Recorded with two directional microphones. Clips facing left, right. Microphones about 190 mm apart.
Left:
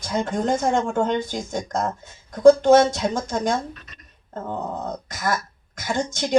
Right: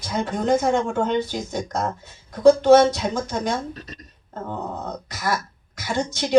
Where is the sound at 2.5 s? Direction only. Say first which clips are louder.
Even; 50° left (ahead or behind).